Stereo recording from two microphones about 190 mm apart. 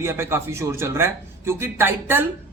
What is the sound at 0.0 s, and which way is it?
A man's voice, 15° right (ahead or behind).